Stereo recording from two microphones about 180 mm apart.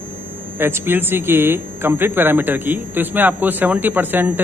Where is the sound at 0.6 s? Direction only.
15° right (ahead or behind).